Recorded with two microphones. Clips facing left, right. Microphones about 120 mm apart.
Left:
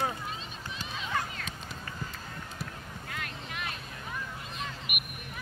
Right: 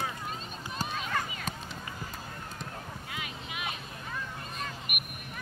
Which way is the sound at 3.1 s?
5° right (ahead or behind).